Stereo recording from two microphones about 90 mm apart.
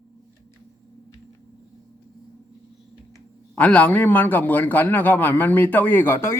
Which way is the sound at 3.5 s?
15° left (ahead or behind).